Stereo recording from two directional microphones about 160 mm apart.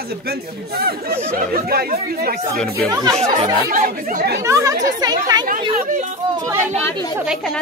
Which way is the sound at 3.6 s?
60° right (ahead or behind).